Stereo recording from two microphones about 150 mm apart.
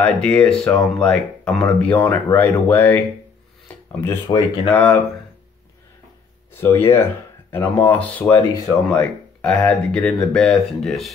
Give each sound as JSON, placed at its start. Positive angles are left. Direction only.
{"t": 0.0, "sound": "speech", "side_deg": 10}
{"t": 4.0, "sound": "speech", "side_deg": 15}
{"t": 6.5, "sound": "speech", "side_deg": 15}